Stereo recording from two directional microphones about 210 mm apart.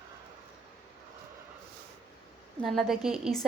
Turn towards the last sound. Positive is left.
turn(degrees=0)  # may be behind; listen again after turning